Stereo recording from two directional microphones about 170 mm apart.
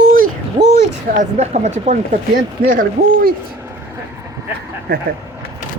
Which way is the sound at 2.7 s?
55° right (ahead or behind).